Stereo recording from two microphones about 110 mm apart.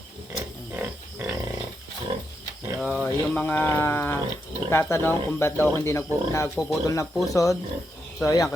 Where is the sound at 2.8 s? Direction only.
10° left (ahead or behind).